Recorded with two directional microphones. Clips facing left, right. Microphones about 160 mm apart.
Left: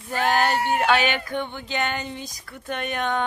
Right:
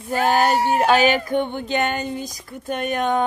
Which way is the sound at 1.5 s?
50° right (ahead or behind).